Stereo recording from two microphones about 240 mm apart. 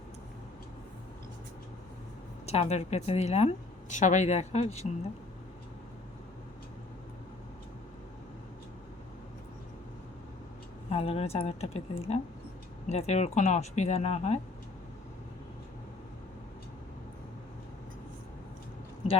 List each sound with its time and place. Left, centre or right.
2.5 s a woman's voice: left
10.8 s a woman's voice: left